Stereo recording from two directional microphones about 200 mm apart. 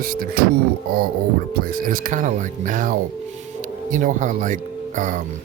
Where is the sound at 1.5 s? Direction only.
45° right (ahead or behind).